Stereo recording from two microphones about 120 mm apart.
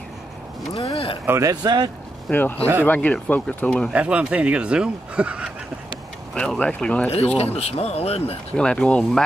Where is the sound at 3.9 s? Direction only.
10° right (ahead or behind).